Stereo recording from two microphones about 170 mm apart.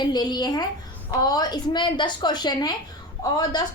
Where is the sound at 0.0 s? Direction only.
25° left (ahead or behind).